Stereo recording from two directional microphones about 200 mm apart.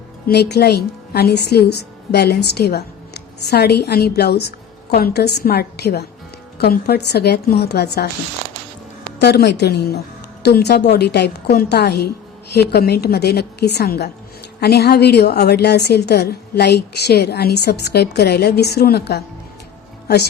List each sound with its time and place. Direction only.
0.3 s a woman's voice: 55° left (ahead or behind)
9.1 s a woman's voice: 55° left (ahead or behind)